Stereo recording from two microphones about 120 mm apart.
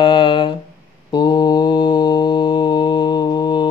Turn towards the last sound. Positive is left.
turn(degrees=40)  # may be behind; listen again after turning